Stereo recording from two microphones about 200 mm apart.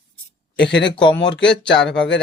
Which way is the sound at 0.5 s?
60° left (ahead or behind).